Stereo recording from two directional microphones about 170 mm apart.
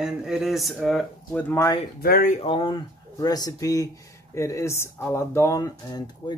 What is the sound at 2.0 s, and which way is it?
Speech, 60° left (ahead or behind).